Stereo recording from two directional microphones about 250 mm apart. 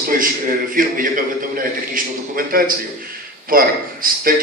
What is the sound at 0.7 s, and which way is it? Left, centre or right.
A man's voice, right.